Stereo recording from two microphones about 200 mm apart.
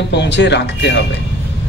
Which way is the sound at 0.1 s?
60° left (ahead or behind).